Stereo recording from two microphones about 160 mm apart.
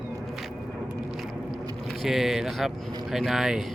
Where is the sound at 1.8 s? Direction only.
Centre (ahead or behind).